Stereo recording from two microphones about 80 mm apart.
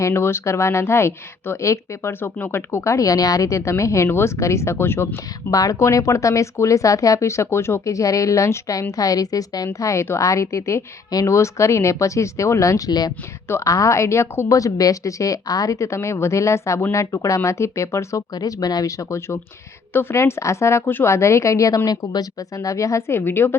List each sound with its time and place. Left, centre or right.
0.0 s speech: left
5.5 s speech: left
9.6 s speech: left
13.5 s speech: left
18.3 s speech: left
21.8 s speech: left